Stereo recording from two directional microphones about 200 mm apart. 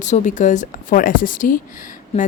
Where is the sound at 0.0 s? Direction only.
40° left (ahead or behind).